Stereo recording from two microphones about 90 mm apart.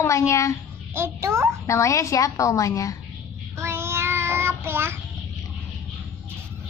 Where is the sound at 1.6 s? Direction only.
35° left (ahead or behind).